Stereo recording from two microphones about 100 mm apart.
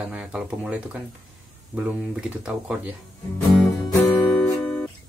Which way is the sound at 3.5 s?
Centre (ahead or behind).